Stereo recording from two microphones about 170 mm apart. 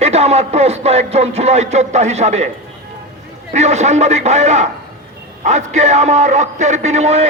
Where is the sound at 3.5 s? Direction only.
40° right (ahead or behind).